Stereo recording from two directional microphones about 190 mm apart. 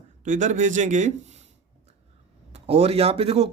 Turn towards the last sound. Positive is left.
turn(degrees=-35)  # may be behind; listen again after turning